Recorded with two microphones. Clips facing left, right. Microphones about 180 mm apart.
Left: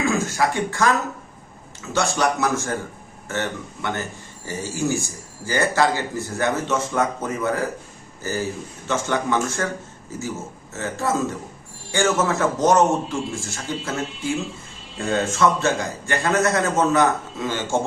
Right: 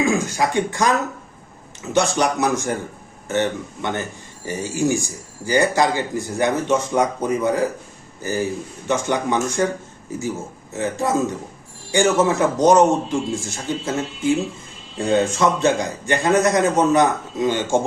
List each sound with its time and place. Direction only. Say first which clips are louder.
0.0 s a man's voice: right 2 dB; 20° right (ahead or behind)